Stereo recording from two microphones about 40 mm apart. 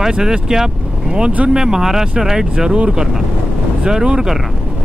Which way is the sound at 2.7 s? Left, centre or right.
Right.